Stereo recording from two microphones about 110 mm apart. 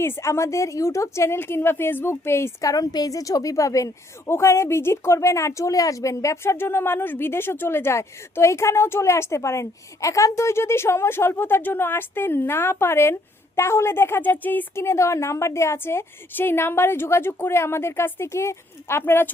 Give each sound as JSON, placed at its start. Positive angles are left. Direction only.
{"t": 0.0, "sound": "a woman's voice", "side_deg": 25}